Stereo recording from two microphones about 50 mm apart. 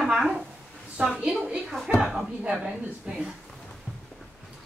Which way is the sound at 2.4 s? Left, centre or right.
Right.